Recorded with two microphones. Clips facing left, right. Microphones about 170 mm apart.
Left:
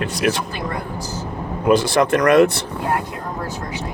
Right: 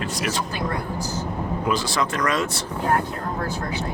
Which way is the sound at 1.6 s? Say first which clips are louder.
Left 10 dB; 55° left (ahead or behind).